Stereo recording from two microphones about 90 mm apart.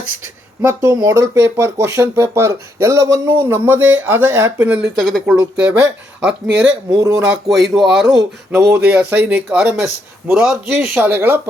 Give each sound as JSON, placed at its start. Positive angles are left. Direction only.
{"t": 0.6, "sound": "speech", "side_deg": -35}
{"t": 4.9, "sound": "speech", "side_deg": 0}
{"t": 7.4, "sound": "speech", "side_deg": -5}
{"t": 8.5, "sound": "speech", "side_deg": -25}